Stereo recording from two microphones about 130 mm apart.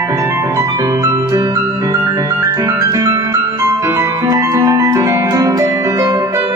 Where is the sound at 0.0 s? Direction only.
20° right (ahead or behind).